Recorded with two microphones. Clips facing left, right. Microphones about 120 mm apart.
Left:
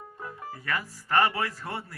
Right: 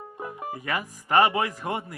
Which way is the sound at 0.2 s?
20° right (ahead or behind).